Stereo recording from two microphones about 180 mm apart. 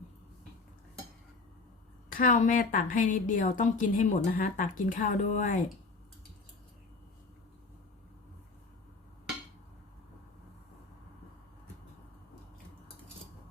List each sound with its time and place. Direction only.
2.0 s a woman's voice: 50° left (ahead or behind)